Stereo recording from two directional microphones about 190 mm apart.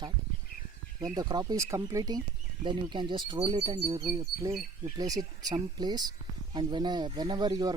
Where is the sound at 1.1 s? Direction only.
20° right (ahead or behind).